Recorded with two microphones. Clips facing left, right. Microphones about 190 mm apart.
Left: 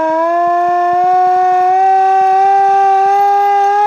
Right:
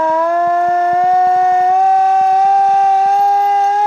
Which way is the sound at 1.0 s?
70° left (ahead or behind).